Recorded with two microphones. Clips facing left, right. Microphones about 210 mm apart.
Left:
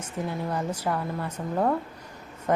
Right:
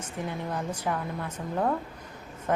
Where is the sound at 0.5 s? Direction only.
10° left (ahead or behind).